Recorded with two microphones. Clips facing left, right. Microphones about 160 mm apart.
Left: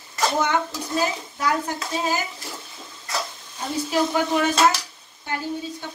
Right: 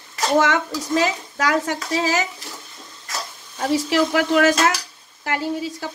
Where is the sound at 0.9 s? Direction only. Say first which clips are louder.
Right 4 dB; 85° right.